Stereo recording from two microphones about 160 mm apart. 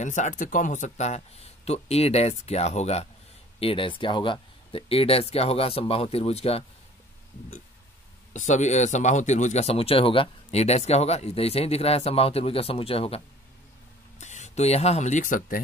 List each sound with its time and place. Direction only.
0.0 s speech: 50° left (ahead or behind)
8.3 s speech: 50° left (ahead or behind)
14.2 s speech: 45° left (ahead or behind)